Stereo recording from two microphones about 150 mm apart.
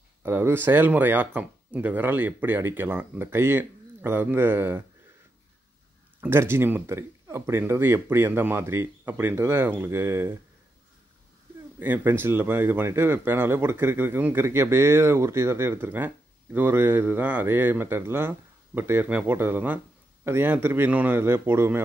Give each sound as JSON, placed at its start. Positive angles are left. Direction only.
{"t": 0.2, "sound": "speech", "side_deg": -15}
{"t": 6.2, "sound": "speech", "side_deg": -15}
{"t": 11.8, "sound": "speech", "side_deg": -15}